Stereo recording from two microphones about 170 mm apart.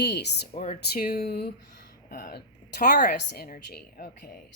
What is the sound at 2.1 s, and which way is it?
Speech, 55° left (ahead or behind).